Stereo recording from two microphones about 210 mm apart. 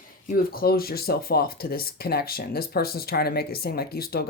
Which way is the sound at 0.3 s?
45° left (ahead or behind).